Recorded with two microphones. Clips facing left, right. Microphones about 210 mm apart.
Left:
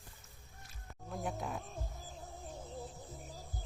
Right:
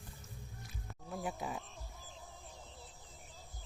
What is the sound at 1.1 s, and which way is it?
Speech, 5° right (ahead or behind).